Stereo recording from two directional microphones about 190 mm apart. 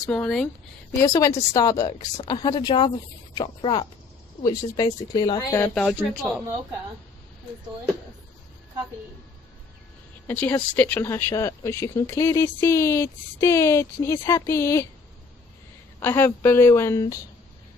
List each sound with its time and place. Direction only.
0.1 s speech: 5° left (ahead or behind)
1.0 s a woman's voice: 15° left (ahead or behind)
10.2 s speech: 10° left (ahead or behind)
16.0 s speech: 10° left (ahead or behind)